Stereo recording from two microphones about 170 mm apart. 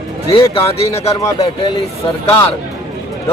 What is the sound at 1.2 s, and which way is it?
Speech, 20° left (ahead or behind).